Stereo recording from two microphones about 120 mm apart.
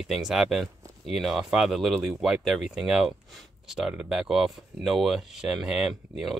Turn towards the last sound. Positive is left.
turn(degrees=-5)  # may be behind; listen again after turning